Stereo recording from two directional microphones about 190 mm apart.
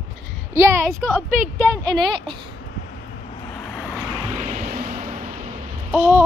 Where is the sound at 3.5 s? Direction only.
5° left (ahead or behind).